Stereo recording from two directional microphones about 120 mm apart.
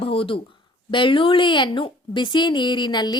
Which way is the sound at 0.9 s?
45° left (ahead or behind).